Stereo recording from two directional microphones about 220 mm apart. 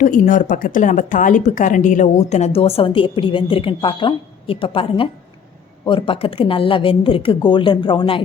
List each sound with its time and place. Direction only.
0.0 s a woman's voice: 35° left (ahead or behind)